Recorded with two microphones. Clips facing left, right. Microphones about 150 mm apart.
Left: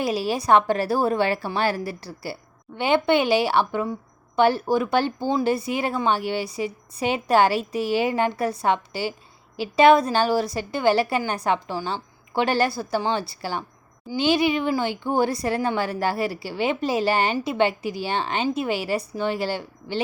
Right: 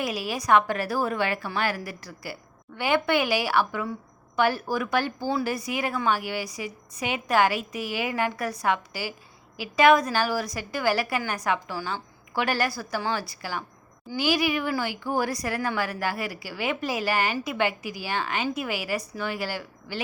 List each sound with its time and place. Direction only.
0.0 s speech: 30° left (ahead or behind)